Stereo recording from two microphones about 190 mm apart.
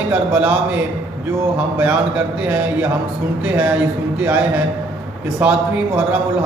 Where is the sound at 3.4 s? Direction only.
5° right (ahead or behind).